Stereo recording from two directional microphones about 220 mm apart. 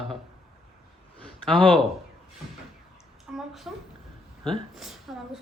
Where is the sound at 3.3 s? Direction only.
Centre (ahead or behind).